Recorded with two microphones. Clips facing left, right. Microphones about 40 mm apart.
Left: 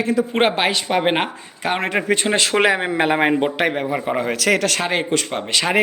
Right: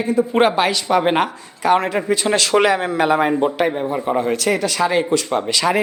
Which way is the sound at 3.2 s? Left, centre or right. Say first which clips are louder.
Even; left.